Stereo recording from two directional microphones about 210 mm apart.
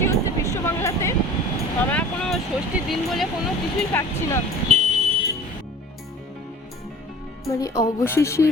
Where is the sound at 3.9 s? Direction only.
15° left (ahead or behind).